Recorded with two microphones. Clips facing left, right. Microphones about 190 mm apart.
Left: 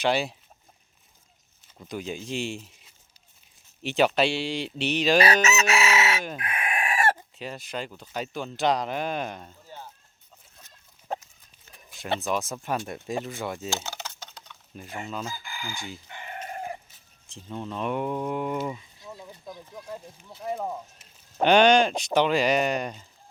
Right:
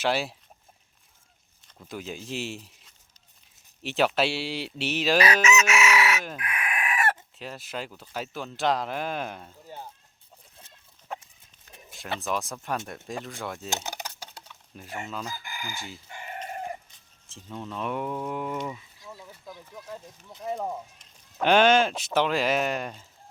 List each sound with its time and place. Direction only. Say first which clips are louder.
0.0 s speech: left 2 dB; 5° right (ahead or behind)
1.6 s speech: left 3 dB; 5° left (ahead or behind)
5.2 s chicken: even; 35° left (ahead or behind)
7.3 s speech: left 2 dB; centre (ahead or behind)
10.6 s chicken: right 1 dB; 30° right (ahead or behind)
11.1 s chicken: left 5 dB; 35° left (ahead or behind)
12.2 s speech: left 2 dB; centre (ahead or behind)
13.8 s typing: right 1 dB; 15° right (ahead or behind)
14.8 s speech: left 1 dB; centre (ahead or behind)
15.7 s chicken: left 1 dB; centre (ahead or behind)
18.7 s a sound: left 3 dB; 25° left (ahead or behind)
19.9 s speech: left 2 dB; 10° left (ahead or behind)